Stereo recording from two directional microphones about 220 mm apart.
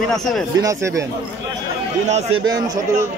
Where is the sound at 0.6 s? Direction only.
15° right (ahead or behind).